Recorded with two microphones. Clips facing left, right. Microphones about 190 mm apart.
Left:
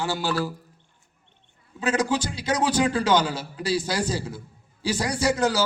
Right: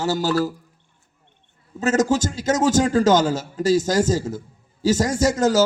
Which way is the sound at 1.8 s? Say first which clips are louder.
Right 5 dB; 45° right (ahead or behind).